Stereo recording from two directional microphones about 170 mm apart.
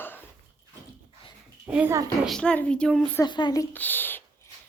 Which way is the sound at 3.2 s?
25° left (ahead or behind).